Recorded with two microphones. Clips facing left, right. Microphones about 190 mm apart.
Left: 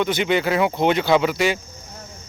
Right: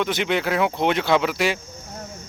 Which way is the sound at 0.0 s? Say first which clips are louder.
Left 2 dB; centre (ahead or behind).